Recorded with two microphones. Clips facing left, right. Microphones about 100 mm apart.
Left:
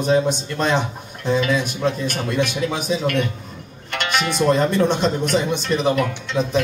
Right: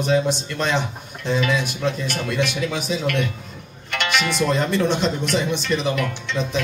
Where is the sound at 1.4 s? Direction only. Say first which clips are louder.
Left 2 dB; 35° left (ahead or behind).